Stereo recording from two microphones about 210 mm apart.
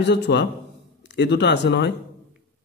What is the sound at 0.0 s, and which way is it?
A man's voice, 55° left (ahead or behind).